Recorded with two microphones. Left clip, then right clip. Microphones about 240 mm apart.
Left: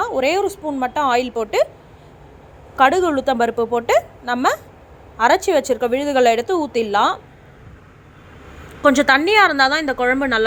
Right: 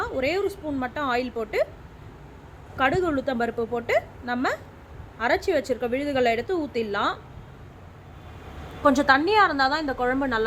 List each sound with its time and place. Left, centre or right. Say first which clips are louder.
0.0 s a woman's voice: left 7 dB; centre
2.7 s a woman's voice: left 8 dB; centre
8.8 s a woman's voice: left 5 dB; centre